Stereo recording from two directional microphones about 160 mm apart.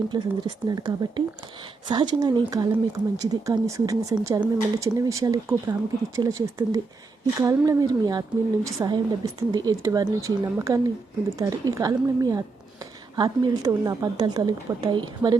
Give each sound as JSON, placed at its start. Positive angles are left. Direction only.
{"t": 0.1, "sound": "a woman's voice", "side_deg": -25}